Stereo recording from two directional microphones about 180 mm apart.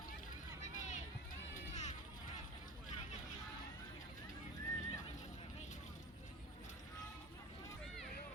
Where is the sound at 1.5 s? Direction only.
40° left (ahead or behind).